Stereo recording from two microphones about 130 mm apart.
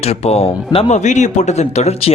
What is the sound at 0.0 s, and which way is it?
Speech, 55° left (ahead or behind).